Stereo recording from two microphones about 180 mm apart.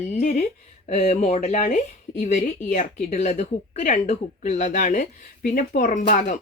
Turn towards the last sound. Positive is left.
turn(degrees=45)  # may be behind; listen again after turning